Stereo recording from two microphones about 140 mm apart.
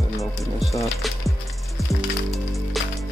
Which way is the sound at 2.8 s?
Centre (ahead or behind).